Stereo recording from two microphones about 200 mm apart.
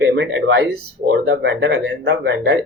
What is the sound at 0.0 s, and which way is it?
Speech, 60° right (ahead or behind).